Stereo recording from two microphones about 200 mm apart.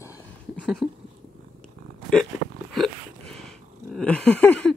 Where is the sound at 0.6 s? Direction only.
Centre (ahead or behind).